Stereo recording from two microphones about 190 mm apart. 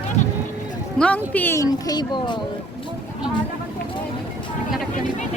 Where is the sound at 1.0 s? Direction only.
10° left (ahead or behind).